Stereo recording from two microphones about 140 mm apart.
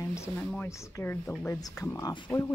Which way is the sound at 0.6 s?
15° left (ahead or behind).